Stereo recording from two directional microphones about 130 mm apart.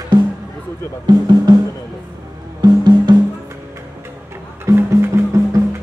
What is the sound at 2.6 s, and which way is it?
Music, 35° right (ahead or behind).